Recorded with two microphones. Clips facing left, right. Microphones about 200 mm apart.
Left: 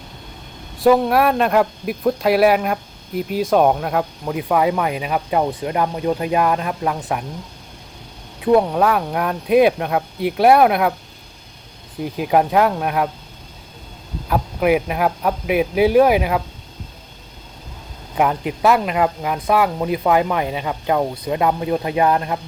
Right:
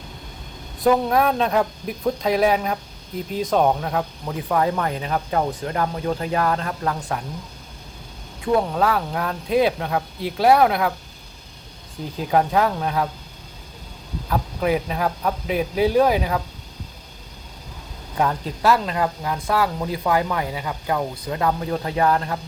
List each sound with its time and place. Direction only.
1.2 s speech: 5° left (ahead or behind)
8.7 s speech: 15° left (ahead or behind)
12.1 s speech: 15° left (ahead or behind)
14.3 s speech: 10° left (ahead or behind)
18.2 s speech: 15° left (ahead or behind)